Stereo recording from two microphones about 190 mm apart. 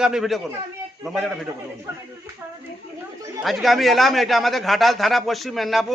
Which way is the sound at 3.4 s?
Centre (ahead or behind).